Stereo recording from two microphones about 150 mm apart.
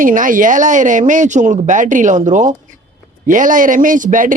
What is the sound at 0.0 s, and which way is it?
A man's voice, 65° right (ahead or behind).